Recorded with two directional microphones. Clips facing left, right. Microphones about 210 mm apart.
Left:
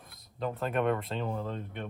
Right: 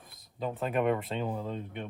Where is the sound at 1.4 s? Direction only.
5° right (ahead or behind).